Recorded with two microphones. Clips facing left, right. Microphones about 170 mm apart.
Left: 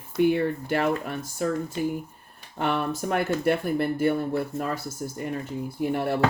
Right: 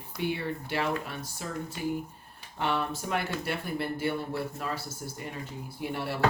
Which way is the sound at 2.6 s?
50° left (ahead or behind).